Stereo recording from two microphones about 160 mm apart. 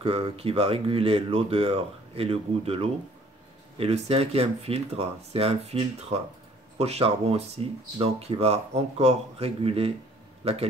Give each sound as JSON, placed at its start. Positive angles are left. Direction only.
{"t": 0.0, "sound": "speech", "side_deg": -40}